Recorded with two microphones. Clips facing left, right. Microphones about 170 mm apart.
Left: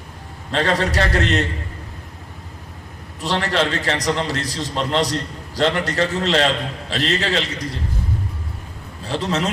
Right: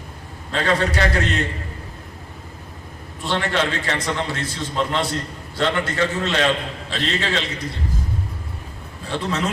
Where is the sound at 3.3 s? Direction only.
40° left (ahead or behind).